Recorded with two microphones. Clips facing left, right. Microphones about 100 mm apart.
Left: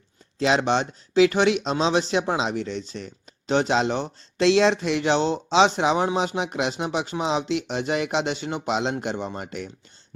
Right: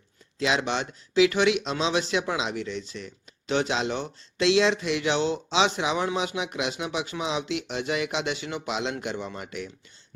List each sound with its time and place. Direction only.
0.3 s speech: 40° left (ahead or behind)